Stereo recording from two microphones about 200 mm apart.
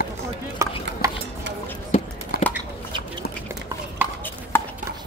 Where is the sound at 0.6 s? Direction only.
15° right (ahead or behind).